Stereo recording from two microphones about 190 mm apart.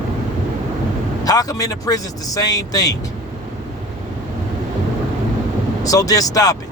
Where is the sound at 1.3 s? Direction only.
20° left (ahead or behind).